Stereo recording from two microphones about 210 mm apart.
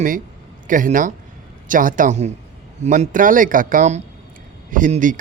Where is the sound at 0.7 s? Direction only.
40° right (ahead or behind).